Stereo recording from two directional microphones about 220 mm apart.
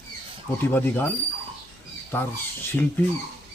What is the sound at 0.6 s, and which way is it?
Speech, 10° left (ahead or behind).